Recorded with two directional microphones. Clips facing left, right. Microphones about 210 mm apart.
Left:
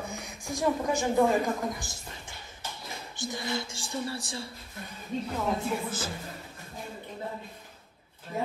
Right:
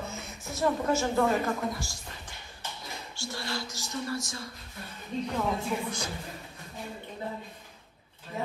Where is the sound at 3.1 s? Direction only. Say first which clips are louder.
Left 3 dB; 20° left (ahead or behind).